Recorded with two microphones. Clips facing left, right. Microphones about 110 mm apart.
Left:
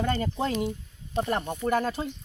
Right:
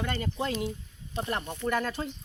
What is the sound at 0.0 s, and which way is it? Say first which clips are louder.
Speech: left 4 dB; 35° left (ahead or behind).